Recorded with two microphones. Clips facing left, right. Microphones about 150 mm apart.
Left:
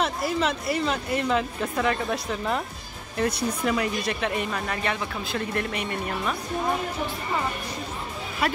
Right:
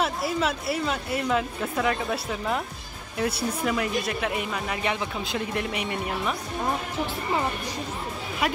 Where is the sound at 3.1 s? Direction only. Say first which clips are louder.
Left 1 dB; 5° right (ahead or behind).